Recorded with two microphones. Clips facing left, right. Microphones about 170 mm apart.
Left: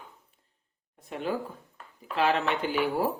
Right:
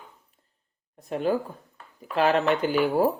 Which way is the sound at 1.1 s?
45° right (ahead or behind).